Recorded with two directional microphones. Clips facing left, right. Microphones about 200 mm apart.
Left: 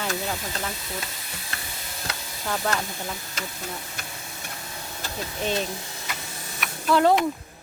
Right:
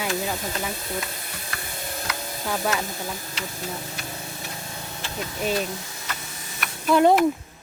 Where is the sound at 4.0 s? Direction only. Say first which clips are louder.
Right 4 dB; 50° left (ahead or behind).